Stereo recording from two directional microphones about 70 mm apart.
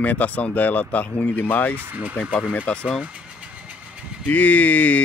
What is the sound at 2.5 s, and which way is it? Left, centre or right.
Speech, centre.